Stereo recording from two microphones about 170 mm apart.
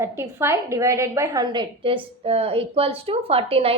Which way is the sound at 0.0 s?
15° right (ahead or behind).